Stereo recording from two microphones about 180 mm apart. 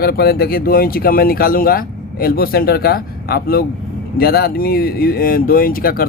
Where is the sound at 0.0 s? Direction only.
60° left (ahead or behind).